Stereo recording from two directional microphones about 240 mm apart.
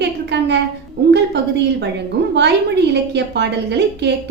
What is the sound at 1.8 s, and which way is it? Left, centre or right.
A woman's voice, right.